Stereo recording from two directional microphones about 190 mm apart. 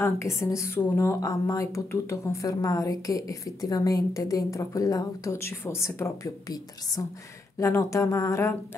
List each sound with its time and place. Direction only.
0.0 s speech: 15° left (ahead or behind)